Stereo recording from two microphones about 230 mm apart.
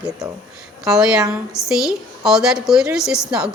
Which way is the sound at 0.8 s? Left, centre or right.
Centre.